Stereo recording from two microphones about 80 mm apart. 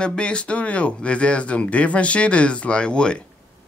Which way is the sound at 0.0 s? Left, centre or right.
Centre.